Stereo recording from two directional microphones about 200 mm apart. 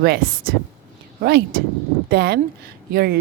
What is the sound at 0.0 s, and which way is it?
A woman's voice, 55° right (ahead or behind).